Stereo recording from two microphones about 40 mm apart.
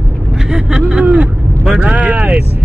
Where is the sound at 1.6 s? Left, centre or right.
Right.